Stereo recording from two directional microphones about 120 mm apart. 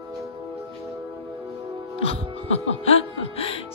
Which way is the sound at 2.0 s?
55° left (ahead or behind).